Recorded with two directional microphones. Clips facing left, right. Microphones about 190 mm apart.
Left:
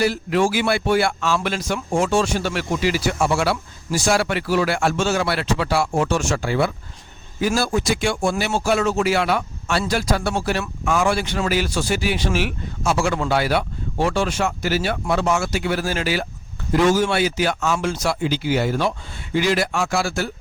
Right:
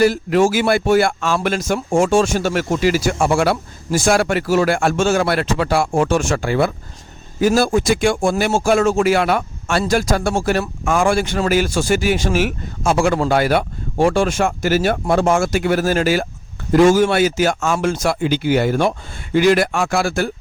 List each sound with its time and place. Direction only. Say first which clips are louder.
0.0 s speech: right 5 dB; 45° right (ahead or behind)